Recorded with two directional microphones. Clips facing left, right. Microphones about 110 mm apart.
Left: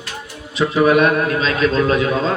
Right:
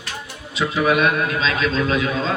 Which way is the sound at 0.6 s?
40° left (ahead or behind).